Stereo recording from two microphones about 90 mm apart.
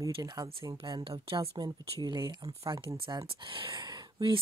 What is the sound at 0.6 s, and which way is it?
Speech, 55° right (ahead or behind).